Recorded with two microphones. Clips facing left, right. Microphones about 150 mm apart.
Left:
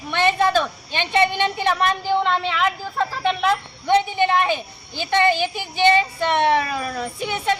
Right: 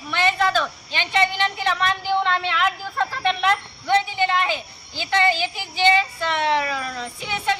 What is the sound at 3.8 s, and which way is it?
Speech, 15° left (ahead or behind).